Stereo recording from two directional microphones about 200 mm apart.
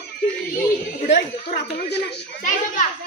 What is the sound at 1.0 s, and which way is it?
A man's voice, 55° left (ahead or behind).